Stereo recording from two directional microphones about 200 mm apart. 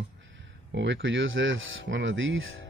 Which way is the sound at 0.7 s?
65° right (ahead or behind).